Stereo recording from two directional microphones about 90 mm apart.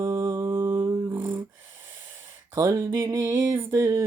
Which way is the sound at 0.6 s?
45° right (ahead or behind).